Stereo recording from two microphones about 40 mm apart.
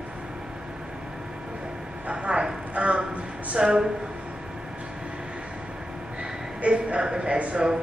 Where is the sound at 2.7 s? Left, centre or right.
Right.